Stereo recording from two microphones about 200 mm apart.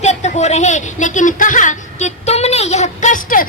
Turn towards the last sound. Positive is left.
turn(degrees=40)  # may be behind; listen again after turning